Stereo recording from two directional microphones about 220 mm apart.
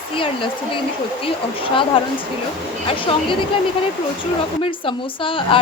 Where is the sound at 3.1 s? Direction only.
25° left (ahead or behind).